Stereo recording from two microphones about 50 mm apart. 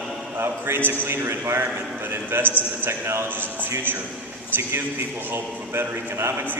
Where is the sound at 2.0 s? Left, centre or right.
Right.